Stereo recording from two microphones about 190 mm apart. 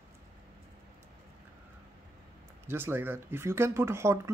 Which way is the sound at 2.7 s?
10° right (ahead or behind).